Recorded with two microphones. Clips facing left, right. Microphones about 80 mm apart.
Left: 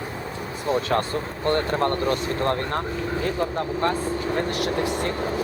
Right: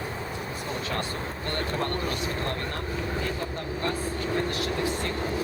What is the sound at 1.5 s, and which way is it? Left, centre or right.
Speech, left.